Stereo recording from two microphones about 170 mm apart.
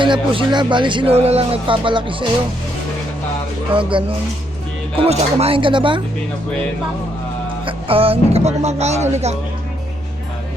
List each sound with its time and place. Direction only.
0.0 s speech: 30° right (ahead or behind)
3.8 s speech: 30° right (ahead or behind)
7.6 s speech: 35° right (ahead or behind)